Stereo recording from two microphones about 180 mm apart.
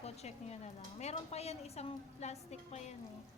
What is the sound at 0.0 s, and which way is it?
Speech, 35° left (ahead or behind).